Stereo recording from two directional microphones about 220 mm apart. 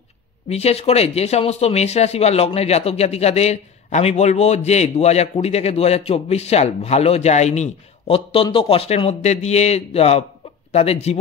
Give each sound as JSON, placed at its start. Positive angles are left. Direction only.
{"t": 0.5, "sound": "a man's voice", "side_deg": 30}